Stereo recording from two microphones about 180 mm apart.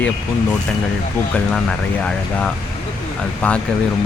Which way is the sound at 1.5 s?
5° left (ahead or behind).